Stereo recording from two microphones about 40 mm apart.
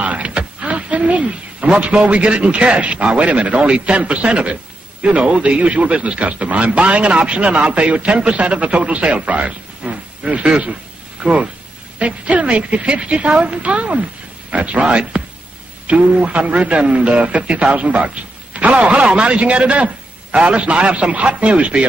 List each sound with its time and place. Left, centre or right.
0.0 s speech: right